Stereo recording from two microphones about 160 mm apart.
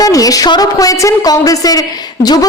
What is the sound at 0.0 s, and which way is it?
A woman's voice, 20° left (ahead or behind).